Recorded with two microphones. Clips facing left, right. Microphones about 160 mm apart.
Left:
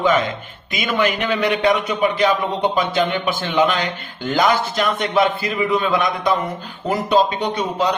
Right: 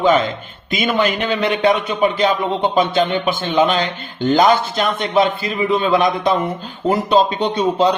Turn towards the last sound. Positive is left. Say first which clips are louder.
# right 4 dB
turn(degrees=-25)  # may be behind; listen again after turning